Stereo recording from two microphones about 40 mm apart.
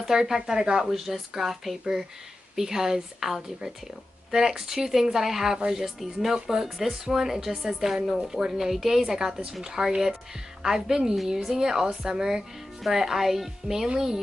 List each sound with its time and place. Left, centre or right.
0.0 s a woman's voice: centre
0.8 s a woman's voice: centre
5.9 s a woman's voice: centre